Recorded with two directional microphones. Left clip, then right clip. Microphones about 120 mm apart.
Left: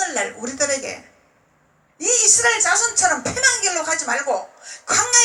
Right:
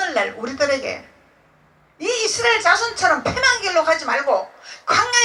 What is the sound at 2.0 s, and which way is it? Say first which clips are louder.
Speech: left 2 dB; 50° left (ahead or behind).